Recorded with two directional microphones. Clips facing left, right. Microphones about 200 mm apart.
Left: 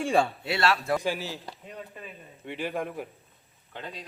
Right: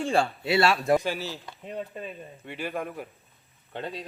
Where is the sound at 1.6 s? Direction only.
25° right (ahead or behind).